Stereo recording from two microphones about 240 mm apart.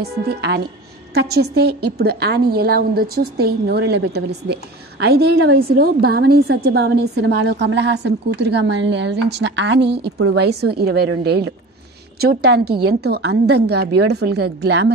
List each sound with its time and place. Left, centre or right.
0.0 s a woman's voice: right